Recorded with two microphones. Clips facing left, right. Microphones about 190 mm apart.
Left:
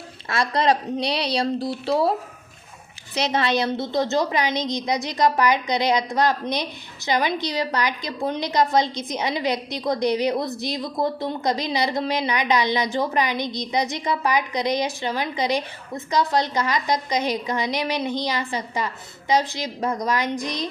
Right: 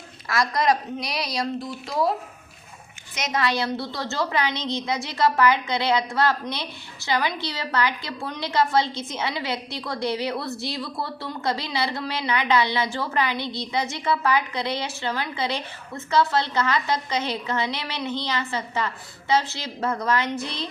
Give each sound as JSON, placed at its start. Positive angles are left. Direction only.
{"t": 0.3, "sound": "a woman's voice", "side_deg": 30}
{"t": 3.2, "sound": "a woman's voice", "side_deg": 30}